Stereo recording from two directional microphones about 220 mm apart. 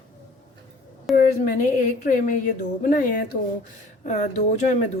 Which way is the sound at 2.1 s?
35° left (ahead or behind).